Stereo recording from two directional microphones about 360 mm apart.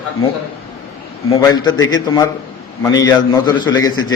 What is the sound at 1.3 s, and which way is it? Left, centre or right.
A man's voice, centre.